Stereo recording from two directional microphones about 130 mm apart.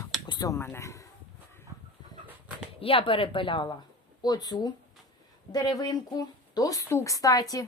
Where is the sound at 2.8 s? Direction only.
45° left (ahead or behind).